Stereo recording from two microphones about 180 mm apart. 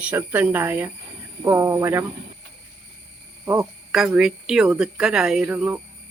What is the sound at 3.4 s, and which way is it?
Speech, 15° right (ahead or behind).